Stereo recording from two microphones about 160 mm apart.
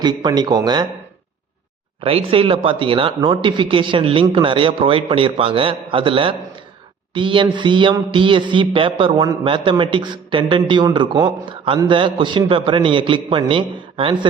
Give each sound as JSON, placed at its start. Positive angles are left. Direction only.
{"t": 0.0, "sound": "speech", "side_deg": -25}
{"t": 2.0, "sound": "speech", "side_deg": -35}